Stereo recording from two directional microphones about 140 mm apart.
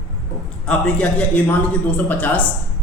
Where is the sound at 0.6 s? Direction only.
5° left (ahead or behind).